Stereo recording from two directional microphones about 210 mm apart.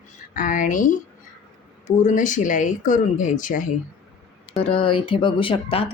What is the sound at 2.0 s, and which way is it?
A woman's voice, 35° left (ahead or behind).